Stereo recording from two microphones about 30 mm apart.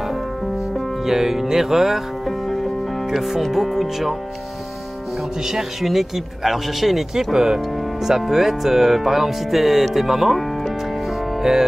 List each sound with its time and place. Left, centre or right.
1.0 s speech: centre
2.2 s music: centre
3.1 s speech: centre
5.4 s speech: centre
5.8 s speech: centre
7.3 s speech: centre
8.3 s speech: centre